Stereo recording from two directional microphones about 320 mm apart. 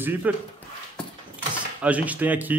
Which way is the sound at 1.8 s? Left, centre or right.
Centre.